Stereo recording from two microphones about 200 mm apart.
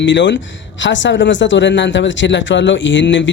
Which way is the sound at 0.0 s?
65° left (ahead or behind).